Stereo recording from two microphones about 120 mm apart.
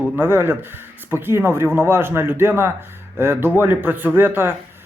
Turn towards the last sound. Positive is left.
turn(degrees=-15)  # may be behind; listen again after turning